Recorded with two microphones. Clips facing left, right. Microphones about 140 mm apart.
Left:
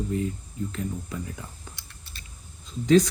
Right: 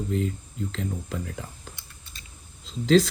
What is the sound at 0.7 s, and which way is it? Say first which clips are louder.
Speech: right 1 dB; 80° right.